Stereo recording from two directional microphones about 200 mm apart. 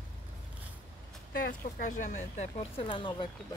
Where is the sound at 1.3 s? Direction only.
45° left (ahead or behind).